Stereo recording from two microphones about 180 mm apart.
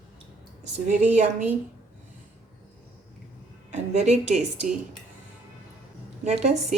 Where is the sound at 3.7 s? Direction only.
40° right (ahead or behind).